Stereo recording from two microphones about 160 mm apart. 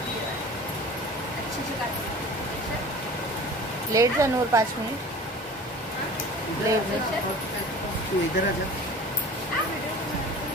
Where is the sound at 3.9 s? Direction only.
20° right (ahead or behind).